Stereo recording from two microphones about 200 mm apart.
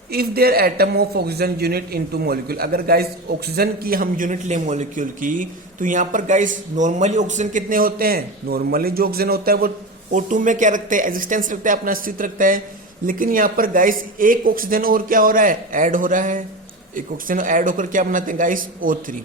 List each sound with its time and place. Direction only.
0.1 s a man's voice: 50° right (ahead or behind)